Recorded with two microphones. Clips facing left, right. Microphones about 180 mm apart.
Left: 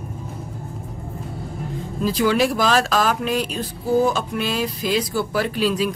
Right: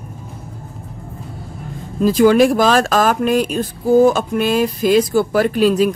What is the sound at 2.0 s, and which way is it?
Speech, 50° right (ahead or behind).